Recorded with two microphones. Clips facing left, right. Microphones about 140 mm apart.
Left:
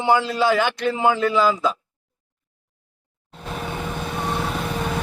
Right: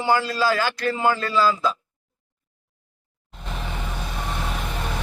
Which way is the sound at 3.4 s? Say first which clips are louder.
Left 4 dB; 5° left (ahead or behind).